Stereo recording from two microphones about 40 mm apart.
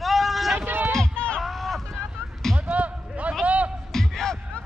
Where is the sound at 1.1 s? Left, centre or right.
Left.